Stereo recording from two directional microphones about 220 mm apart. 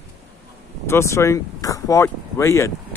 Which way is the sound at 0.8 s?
10° left (ahead or behind).